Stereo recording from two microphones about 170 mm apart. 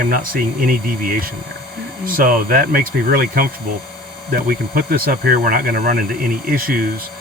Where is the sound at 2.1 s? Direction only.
55° right (ahead or behind).